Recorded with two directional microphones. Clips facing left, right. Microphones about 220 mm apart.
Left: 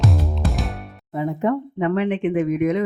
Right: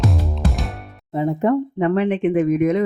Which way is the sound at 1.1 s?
30° right (ahead or behind).